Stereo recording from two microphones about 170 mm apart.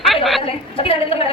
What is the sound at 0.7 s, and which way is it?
Speech, 35° left (ahead or behind).